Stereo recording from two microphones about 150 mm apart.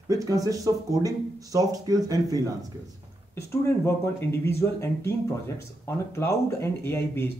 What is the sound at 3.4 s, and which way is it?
A man's voice, 20° left (ahead or behind).